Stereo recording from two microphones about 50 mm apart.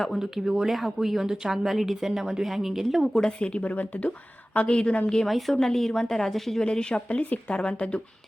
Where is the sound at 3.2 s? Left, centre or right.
Centre.